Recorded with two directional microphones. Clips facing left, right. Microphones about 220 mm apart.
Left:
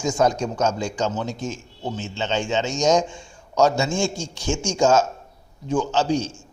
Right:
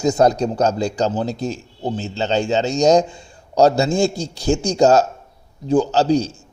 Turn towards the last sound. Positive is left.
turn(degrees=-35)  # may be behind; listen again after turning